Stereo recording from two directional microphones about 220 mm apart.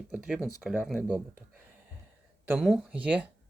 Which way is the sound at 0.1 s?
5° right (ahead or behind).